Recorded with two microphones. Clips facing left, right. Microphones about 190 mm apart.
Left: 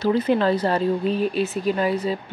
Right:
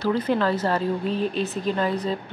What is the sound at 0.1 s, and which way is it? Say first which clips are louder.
Speech: left 3 dB; 15° left (ahead or behind).